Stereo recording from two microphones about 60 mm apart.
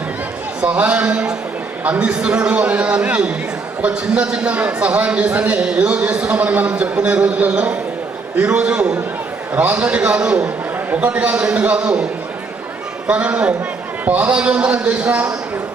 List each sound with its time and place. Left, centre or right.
0.6 s a man's voice: centre
13.1 s a man's voice: right